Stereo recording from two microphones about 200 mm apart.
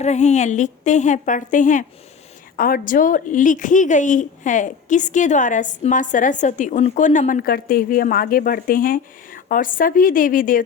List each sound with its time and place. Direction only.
0.0 s a woman's voice: 35° left (ahead or behind)